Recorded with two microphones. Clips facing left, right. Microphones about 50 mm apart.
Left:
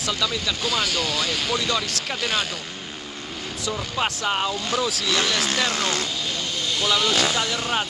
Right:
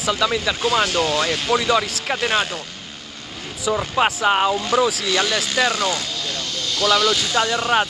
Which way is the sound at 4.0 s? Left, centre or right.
Centre.